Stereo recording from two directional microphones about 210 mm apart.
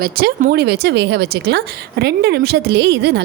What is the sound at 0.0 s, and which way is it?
A woman's voice, 45° right (ahead or behind).